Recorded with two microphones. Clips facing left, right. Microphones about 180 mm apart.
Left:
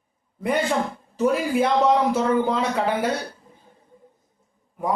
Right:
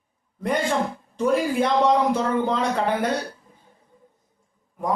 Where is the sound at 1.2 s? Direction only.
5° left (ahead or behind).